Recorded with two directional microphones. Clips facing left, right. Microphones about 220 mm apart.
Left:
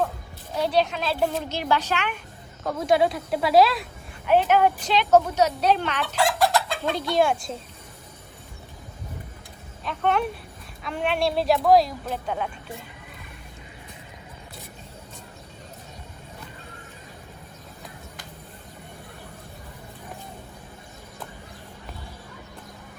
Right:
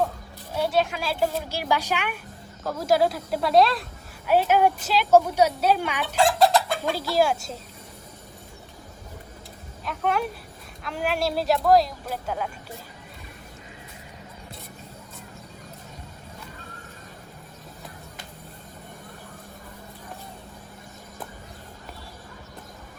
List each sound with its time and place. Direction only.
0.5 s a woman's voice: 5° right (ahead or behind)
6.1 s speech: 25° right (ahead or behind)
6.9 s a woman's voice: 5° right (ahead or behind)
9.8 s a woman's voice: 5° right (ahead or behind)